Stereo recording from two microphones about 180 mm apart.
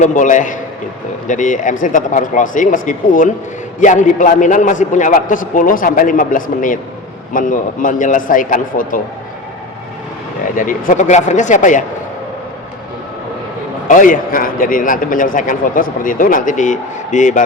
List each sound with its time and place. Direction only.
0.0 s a man's voice: 45° left (ahead or behind)
10.6 s a man's voice: 50° left (ahead or behind)
13.8 s a man's voice: 45° left (ahead or behind)